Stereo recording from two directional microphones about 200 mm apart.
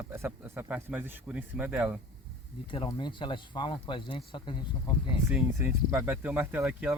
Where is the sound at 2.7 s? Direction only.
25° left (ahead or behind).